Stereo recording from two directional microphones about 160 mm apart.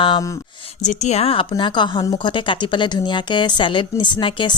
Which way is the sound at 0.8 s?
45° left (ahead or behind).